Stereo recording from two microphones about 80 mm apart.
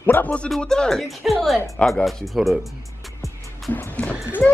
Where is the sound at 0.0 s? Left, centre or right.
Left; by 1.6 s centre.